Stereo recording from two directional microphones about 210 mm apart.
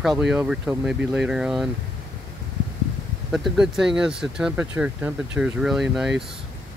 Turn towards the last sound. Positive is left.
turn(degrees=0)  # may be behind; listen again after turning